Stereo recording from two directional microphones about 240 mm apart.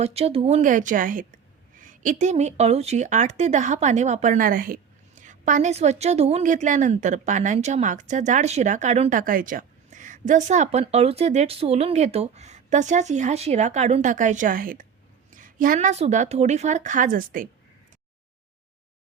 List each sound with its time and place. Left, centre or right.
0.0 s a woman's voice: right